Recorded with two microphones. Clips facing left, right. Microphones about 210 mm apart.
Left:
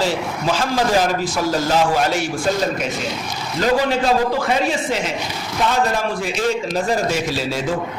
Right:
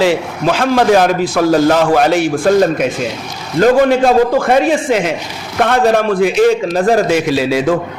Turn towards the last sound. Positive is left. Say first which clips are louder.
# right 9 dB
turn(degrees=-65)  # may be behind; listen again after turning